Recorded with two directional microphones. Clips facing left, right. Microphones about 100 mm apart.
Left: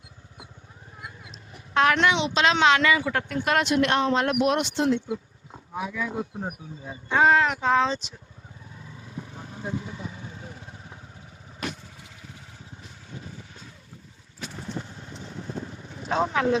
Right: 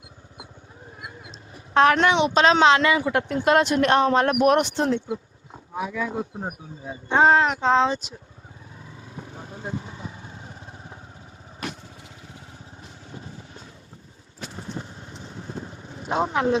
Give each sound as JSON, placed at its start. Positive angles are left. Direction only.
{"t": 1.3, "sound": "vehicle horn", "side_deg": -35}
{"t": 2.4, "sound": "a woman's voice", "side_deg": -35}
{"t": 3.6, "sound": "speech", "side_deg": -40}
{"t": 6.0, "sound": "a woman's voice", "side_deg": -25}
{"t": 6.9, "sound": "a woman's voice", "side_deg": -30}
{"t": 9.3, "sound": "vehicle", "side_deg": -30}
{"t": 13.1, "sound": "vehicle", "side_deg": -35}
{"t": 16.0, "sound": "a woman's voice", "side_deg": -20}